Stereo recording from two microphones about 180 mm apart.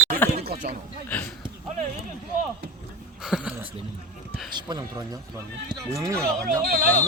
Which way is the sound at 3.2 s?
Centre (ahead or behind).